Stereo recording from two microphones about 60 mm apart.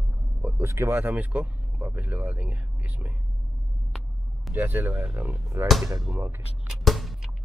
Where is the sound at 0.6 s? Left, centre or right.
Right.